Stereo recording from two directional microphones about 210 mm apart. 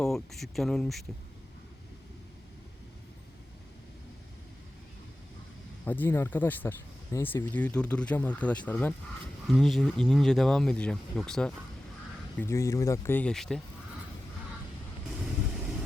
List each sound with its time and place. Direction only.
0.0 s speech: centre (ahead or behind)
5.8 s speech: 10° left (ahead or behind)